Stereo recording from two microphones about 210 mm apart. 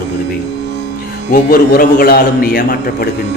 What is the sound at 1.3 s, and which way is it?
A man's voice, 40° left (ahead or behind).